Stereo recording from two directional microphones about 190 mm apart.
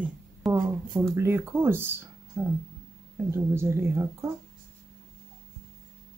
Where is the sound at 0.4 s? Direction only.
Centre (ahead or behind).